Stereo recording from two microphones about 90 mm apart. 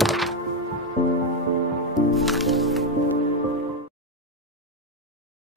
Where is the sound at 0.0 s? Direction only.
Centre (ahead or behind).